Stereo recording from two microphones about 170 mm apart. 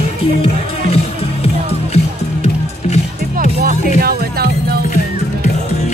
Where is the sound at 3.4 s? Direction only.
55° right (ahead or behind).